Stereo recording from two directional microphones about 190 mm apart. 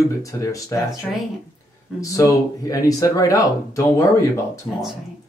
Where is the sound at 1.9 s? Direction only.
15° left (ahead or behind).